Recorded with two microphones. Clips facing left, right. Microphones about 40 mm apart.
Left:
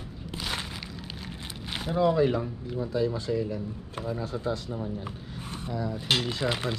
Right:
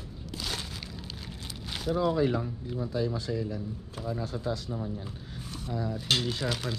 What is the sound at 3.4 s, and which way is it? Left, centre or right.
A man's voice, left.